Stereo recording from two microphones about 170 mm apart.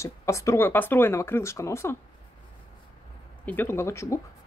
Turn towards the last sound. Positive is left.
turn(degrees=15)  # may be behind; listen again after turning